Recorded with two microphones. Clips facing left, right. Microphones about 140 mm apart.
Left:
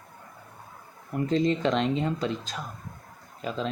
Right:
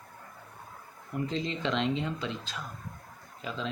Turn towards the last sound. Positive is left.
turn(degrees=45)  # may be behind; listen again after turning